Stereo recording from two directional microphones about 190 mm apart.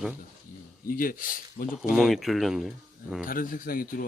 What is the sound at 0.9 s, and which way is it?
Speech, 45° left (ahead or behind).